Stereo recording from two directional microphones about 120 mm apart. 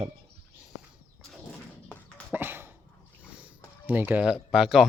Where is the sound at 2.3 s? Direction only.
15° right (ahead or behind).